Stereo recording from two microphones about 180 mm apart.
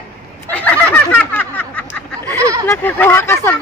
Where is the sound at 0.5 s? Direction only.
10° left (ahead or behind).